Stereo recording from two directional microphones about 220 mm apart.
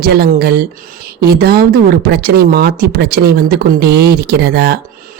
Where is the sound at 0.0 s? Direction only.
45° right (ahead or behind).